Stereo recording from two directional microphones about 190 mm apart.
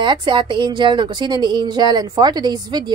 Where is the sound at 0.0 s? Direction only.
25° right (ahead or behind).